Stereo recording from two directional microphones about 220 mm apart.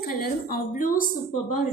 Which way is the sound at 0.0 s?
40° left (ahead or behind).